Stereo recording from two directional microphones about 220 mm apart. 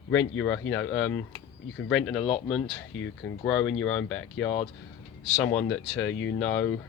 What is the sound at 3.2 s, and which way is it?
Speech, 55° left (ahead or behind).